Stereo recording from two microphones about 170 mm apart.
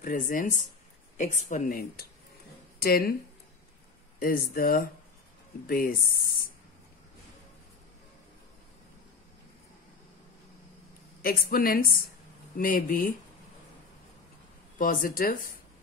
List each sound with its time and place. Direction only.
0.0 s a woman's voice: 50° left (ahead or behind)
4.2 s a woman's voice: 60° left (ahead or behind)
11.2 s a woman's voice: 60° left (ahead or behind)
14.8 s a woman's voice: 55° left (ahead or behind)